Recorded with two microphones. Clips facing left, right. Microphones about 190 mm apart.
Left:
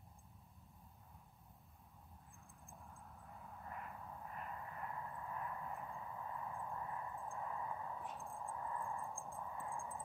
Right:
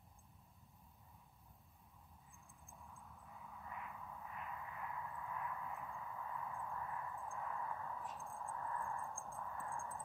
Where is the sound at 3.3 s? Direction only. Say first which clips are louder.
Left 1 dB; 45° left (ahead or behind).